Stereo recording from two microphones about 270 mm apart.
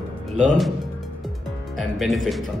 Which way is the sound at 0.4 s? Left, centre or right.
Centre.